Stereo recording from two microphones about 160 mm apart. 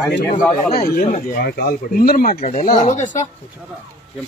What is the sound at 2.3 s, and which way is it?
Speech, 45° left (ahead or behind).